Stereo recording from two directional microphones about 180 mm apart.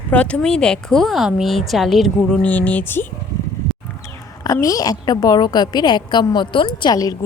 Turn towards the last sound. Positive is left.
turn(degrees=20)  # may be behind; listen again after turning